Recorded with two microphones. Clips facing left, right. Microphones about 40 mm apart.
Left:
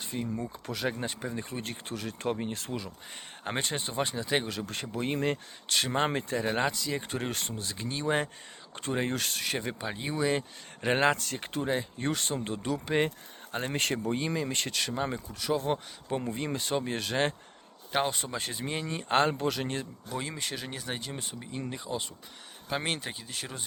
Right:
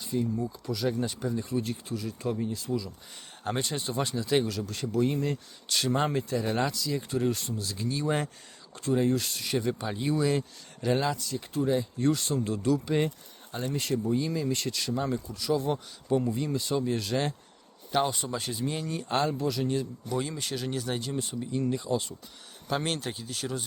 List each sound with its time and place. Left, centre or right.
0.0 s speech: left
3.4 s speech: left
4.5 s speech: left
7.6 s speech: left
8.7 s speech: left
9.8 s speech: centre
10.8 s speech: left
11.6 s speech: left
17.9 s speech: left
20.1 s speech: centre
21.1 s speech: left